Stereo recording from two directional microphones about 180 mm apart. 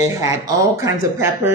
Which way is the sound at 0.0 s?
20° right (ahead or behind).